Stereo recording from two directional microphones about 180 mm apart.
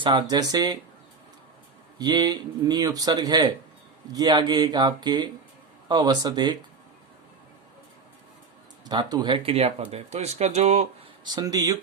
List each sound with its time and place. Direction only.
0.0 s speech: 25° right (ahead or behind)
2.0 s speech: 25° right (ahead or behind)
8.8 s speech: 25° right (ahead or behind)
11.3 s speech: 20° right (ahead or behind)